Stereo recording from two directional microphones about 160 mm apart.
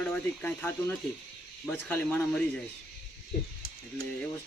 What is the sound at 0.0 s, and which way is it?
Speech, 10° left (ahead or behind).